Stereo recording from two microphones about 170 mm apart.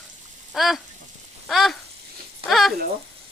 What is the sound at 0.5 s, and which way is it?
Speech, centre (ahead or behind).